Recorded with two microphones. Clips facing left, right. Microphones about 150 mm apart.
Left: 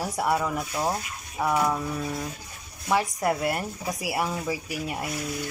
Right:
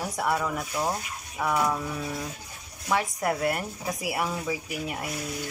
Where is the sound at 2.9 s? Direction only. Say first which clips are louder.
Left 2 dB; 5° left (ahead or behind).